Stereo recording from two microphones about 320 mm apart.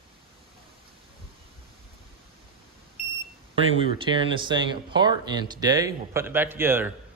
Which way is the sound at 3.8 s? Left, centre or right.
Centre.